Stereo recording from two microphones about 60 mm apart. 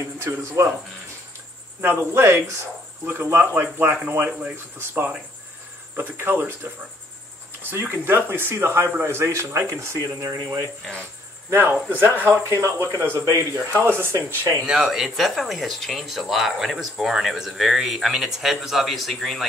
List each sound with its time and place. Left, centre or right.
0.0 s speech: right
1.8 s speech: right
7.8 s speech: right
11.7 s speech: right
12.3 s speech: right
13.8 s speech: right
14.6 s speech: centre